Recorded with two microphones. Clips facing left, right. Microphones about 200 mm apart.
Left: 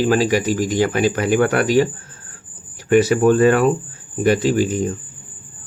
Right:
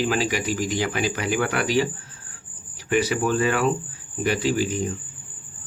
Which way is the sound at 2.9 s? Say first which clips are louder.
Left 8 dB; 45° left (ahead or behind).